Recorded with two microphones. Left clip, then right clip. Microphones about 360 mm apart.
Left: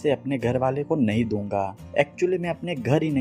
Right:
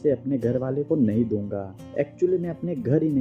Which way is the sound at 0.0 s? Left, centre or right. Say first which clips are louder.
Even; centre.